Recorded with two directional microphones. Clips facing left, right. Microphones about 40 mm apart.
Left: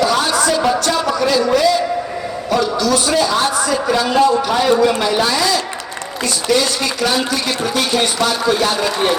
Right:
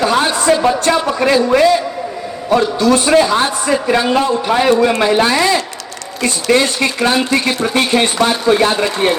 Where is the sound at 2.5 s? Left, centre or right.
Right.